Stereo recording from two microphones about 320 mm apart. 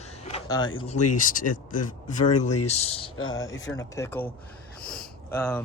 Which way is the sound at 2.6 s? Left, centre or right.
Centre.